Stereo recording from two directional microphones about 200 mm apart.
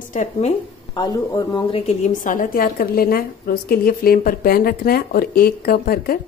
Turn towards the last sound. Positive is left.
turn(degrees=50)  # may be behind; listen again after turning